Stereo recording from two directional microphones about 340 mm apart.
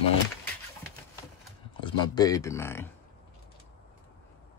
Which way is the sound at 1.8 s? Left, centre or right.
Centre.